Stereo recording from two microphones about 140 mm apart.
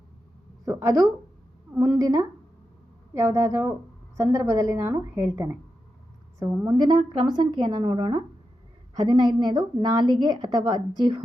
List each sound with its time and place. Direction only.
0.6 s a woman's voice: 20° right (ahead or behind)
6.7 s a woman's voice: 30° right (ahead or behind)